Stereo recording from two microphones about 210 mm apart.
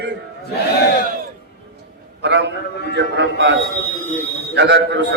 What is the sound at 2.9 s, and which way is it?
A man's voice, 55° right (ahead or behind).